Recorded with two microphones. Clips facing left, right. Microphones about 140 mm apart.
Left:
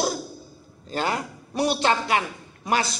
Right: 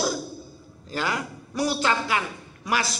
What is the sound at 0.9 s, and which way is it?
Speech, 30° left (ahead or behind).